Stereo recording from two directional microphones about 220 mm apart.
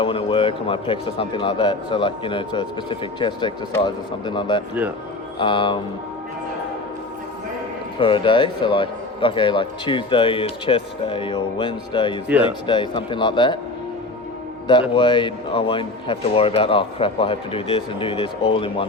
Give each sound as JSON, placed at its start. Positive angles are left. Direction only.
{"t": 0.0, "sound": "speech", "side_deg": 25}
{"t": 7.9, "sound": "speech", "side_deg": 25}
{"t": 14.7, "sound": "speech", "side_deg": 20}